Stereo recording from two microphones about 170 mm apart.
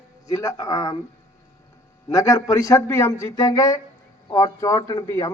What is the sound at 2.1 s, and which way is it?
A man's voice, 20° left (ahead or behind).